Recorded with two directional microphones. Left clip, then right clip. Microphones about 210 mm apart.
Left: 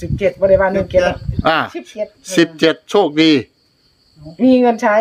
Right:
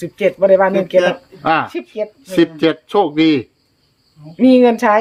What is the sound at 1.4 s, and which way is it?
Speech, 30° left (ahead or behind).